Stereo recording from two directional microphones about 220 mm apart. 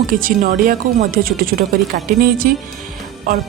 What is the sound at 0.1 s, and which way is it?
A woman's voice, 40° right (ahead or behind).